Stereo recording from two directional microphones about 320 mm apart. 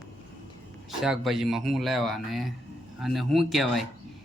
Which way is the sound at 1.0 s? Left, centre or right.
Centre.